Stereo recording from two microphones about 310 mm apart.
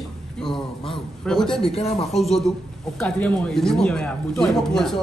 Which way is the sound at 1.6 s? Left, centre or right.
Centre.